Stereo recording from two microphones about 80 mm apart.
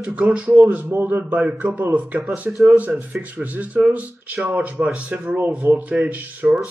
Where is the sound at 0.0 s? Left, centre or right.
Centre.